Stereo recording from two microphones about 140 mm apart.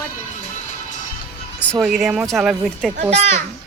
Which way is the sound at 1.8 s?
5° right (ahead or behind).